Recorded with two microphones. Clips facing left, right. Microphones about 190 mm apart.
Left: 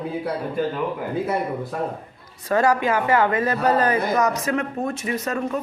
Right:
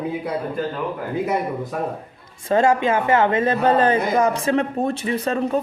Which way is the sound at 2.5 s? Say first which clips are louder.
Right 2 dB; 25° right (ahead or behind).